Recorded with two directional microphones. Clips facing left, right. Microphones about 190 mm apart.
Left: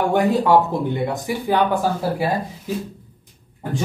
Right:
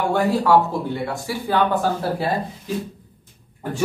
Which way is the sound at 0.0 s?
15° left (ahead or behind).